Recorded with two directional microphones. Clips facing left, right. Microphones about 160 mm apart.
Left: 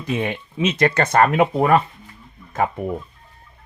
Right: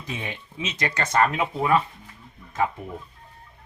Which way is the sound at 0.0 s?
60° left (ahead or behind).